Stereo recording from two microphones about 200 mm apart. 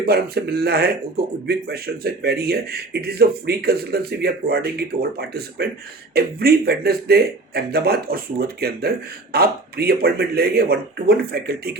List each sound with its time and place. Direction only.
0.0 s a man's voice: 55° right (ahead or behind)